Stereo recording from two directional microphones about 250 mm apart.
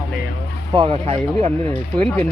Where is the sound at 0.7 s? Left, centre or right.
Right.